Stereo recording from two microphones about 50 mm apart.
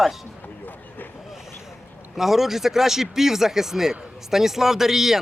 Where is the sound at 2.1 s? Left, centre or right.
Centre.